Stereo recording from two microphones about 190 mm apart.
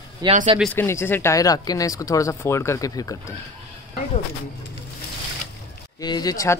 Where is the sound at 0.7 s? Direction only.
10° left (ahead or behind).